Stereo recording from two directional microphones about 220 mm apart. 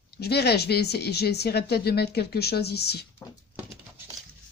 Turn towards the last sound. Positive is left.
turn(degrees=45)  # may be behind; listen again after turning